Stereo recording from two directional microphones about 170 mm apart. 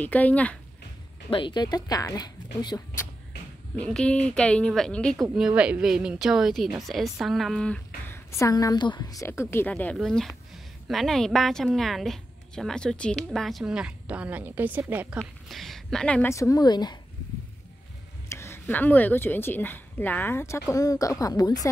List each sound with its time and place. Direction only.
0.0 s speech: 10° left (ahead or behind)
1.3 s speech: 30° left (ahead or behind)
3.7 s a woman's voice: 5° left (ahead or behind); by 17.0 s 25° left (ahead or behind)
18.3 s speech: 15° left (ahead or behind)